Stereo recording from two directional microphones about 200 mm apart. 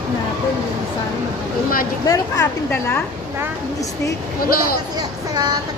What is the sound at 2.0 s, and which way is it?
Speech, 15° left (ahead or behind).